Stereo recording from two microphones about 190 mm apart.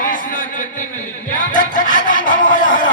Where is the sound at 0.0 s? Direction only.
45° left (ahead or behind).